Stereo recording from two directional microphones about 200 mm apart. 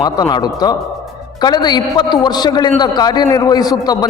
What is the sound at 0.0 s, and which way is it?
A man's voice, 20° left (ahead or behind).